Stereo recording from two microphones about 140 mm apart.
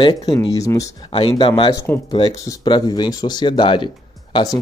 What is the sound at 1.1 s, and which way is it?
Speech, 40° left (ahead or behind).